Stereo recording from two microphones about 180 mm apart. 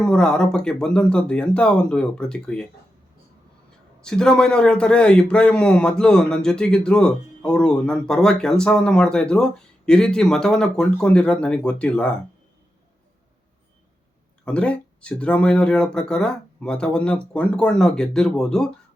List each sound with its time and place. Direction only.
0.0 s a man's voice: 5° left (ahead or behind)
4.0 s a man's voice: 5° left (ahead or behind)
14.4 s a man's voice: 5° left (ahead or behind)